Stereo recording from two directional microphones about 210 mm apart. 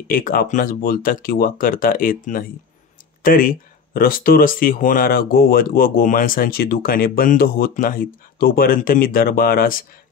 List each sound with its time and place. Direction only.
0.1 s speech: 45° left (ahead or behind)